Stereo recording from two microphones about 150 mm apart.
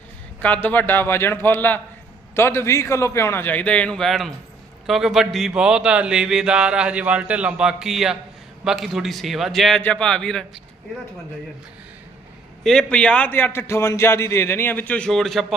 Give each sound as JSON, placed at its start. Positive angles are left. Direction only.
{"t": 0.4, "sound": "a man's voice", "side_deg": 10}
{"t": 12.6, "sound": "a man's voice", "side_deg": 5}